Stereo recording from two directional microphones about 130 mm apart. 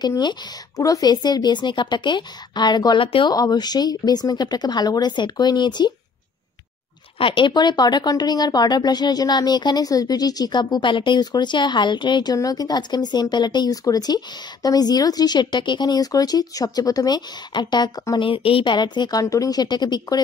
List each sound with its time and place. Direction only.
0.0 s speech: 35° left (ahead or behind)
3.3 s speech: 30° left (ahead or behind)
7.2 s speech: 40° left (ahead or behind)